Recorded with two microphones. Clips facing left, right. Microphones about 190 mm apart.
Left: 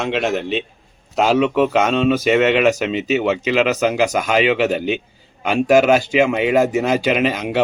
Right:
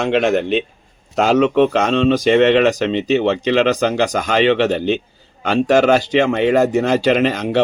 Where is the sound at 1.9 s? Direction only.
5° left (ahead or behind).